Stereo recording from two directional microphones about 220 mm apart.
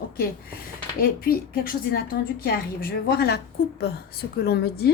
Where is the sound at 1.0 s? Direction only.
40° left (ahead or behind).